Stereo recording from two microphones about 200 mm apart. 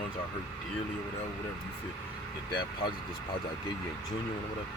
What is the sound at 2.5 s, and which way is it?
Speech, 25° left (ahead or behind).